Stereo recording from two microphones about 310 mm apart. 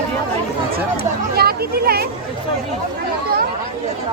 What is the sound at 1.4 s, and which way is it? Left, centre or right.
Speech, right.